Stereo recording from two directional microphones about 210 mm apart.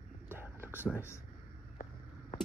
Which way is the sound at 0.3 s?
10° right (ahead or behind).